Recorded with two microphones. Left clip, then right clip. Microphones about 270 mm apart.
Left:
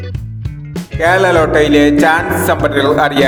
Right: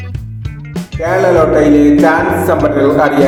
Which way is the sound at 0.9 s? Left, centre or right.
Left.